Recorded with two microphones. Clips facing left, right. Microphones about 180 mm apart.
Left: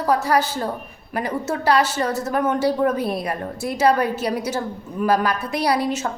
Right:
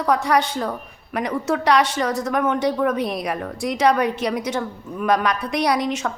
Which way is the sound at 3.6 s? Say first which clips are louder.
Even; 5° left (ahead or behind).